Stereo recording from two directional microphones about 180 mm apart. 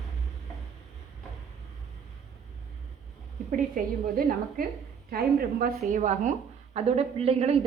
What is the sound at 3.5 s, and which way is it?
A woman's voice, 55° right (ahead or behind).